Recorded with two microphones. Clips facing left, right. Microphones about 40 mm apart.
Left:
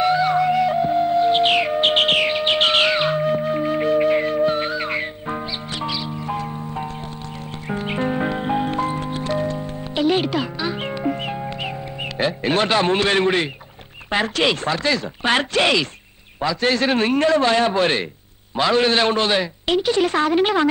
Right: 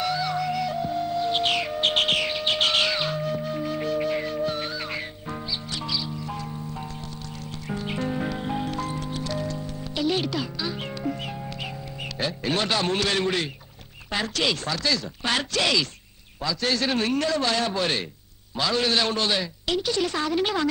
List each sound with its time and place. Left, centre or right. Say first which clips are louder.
0.0 s music: left 9 dB; left
12.2 s a man's voice: left 7 dB; left